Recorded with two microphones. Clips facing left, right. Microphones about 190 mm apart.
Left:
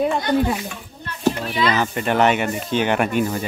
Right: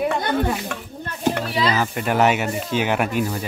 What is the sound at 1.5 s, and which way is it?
Speech, 35° right (ahead or behind).